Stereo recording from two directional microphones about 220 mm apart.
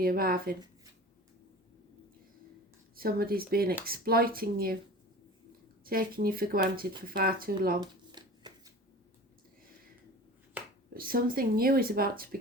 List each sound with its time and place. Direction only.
0.0 s speech: 40° right (ahead or behind)
2.9 s speech: 40° right (ahead or behind)
5.8 s speech: 40° right (ahead or behind)
7.8 s shuffling cards: 20° right (ahead or behind)
10.9 s speech: 40° right (ahead or behind)